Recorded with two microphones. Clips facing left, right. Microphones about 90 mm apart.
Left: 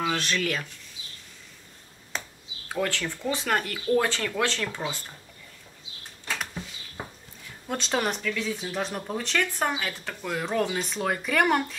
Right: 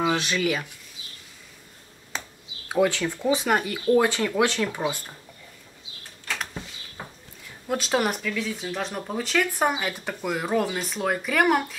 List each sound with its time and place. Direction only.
0.0 s speech: 15° right (ahead or behind)
2.1 s computer keyboard: centre (ahead or behind)
2.7 s speech: 15° right (ahead or behind)
7.6 s speech: 5° right (ahead or behind)